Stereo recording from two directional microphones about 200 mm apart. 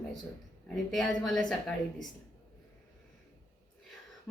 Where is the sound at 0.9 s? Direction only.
Centre (ahead or behind).